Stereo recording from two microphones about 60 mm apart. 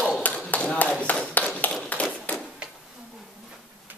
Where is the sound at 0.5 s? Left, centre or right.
Left.